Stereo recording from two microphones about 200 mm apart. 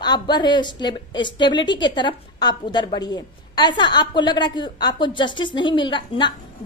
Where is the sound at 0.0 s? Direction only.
20° left (ahead or behind).